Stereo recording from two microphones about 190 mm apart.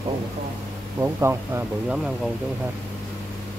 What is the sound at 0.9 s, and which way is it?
Speech, 15° right (ahead or behind).